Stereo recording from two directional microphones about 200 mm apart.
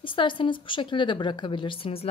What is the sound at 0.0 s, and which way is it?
Speech, 25° left (ahead or behind).